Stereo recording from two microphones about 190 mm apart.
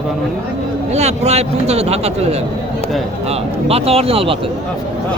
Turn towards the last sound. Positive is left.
turn(degrees=-30)  # may be behind; listen again after turning